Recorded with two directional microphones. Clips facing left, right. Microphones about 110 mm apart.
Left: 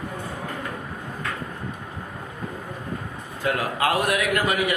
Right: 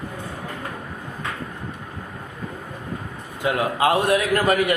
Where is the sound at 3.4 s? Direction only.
25° right (ahead or behind).